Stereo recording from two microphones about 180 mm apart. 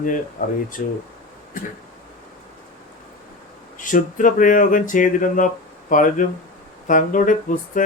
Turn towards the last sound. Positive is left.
turn(degrees=45)  # may be behind; listen again after turning